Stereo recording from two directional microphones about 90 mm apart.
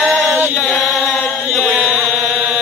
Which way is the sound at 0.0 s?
Centre (ahead or behind).